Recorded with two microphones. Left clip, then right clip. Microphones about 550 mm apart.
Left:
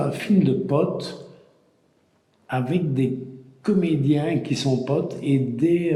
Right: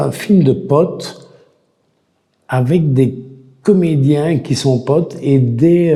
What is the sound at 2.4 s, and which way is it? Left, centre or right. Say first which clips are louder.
Speech: right 9 dB; right.